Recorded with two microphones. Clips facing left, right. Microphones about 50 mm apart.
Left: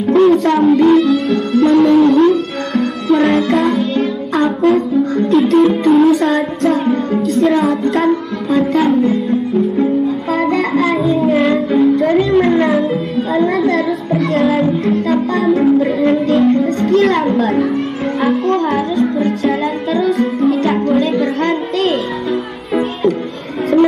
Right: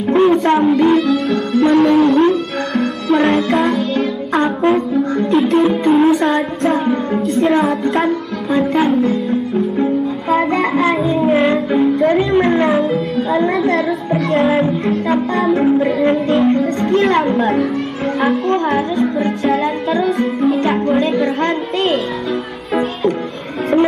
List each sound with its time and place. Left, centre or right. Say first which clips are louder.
0.1 s a sound: left 2 dB; centre
0.6 s music: left 3 dB; centre
4.4 s music: left 2 dB; centre
5.4 s music: left 3 dB; centre
6.2 s child singing: left 1 dB; centre
7.6 s music: left 2 dB; centre
13.3 s a sound: left 1 dB; centre
14.4 s music: left 1 dB; centre
23.7 s music: left 2 dB; right